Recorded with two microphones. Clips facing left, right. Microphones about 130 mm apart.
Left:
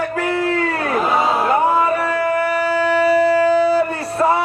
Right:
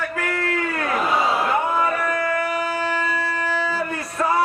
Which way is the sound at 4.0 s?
30° left (ahead or behind).